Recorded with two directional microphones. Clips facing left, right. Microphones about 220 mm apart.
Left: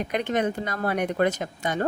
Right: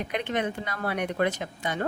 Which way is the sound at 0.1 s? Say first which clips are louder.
Left 4 dB; 45° left (ahead or behind).